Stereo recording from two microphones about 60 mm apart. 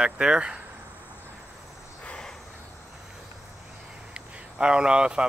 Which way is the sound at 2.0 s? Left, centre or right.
Centre.